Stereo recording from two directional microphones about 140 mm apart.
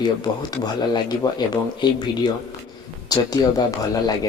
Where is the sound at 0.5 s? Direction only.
30° left (ahead or behind).